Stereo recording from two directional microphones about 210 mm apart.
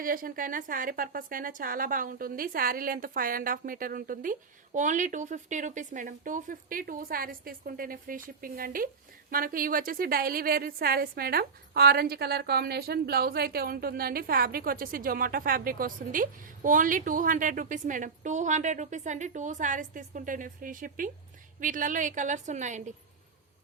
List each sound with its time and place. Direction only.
0.0 s a woman's voice: 40° right (ahead or behind)